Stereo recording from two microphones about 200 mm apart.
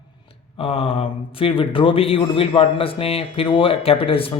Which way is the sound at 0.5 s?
30° left (ahead or behind).